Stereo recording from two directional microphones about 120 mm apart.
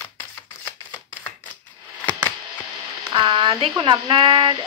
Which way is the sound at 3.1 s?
45° right (ahead or behind).